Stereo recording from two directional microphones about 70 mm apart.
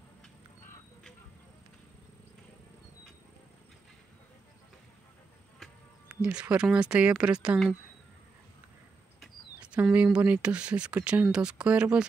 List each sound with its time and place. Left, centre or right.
6.0 s speech: right
9.6 s speech: centre